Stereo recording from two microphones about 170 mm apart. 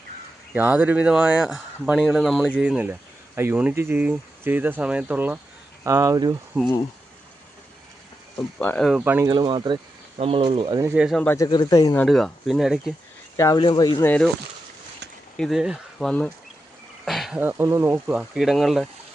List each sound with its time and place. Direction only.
0.5 s speech: 10° right (ahead or behind)
8.5 s speech: 10° left (ahead or behind)
8.9 s speech: 10° right (ahead or behind)
9.3 s speech: 25° right (ahead or behind)
10.9 s speech: 5° right (ahead or behind)
11.2 s speech: 10° left (ahead or behind)
11.4 s speech: 25° left (ahead or behind)
12.0 s speech: centre (ahead or behind)
13.3 s speech: 20° left (ahead or behind)
14.0 s speech: 10° left (ahead or behind)
15.4 s speech: centre (ahead or behind)
17.1 s a sound: centre (ahead or behind)
17.4 s speech: 15° right (ahead or behind)
18.2 s speech: centre (ahead or behind)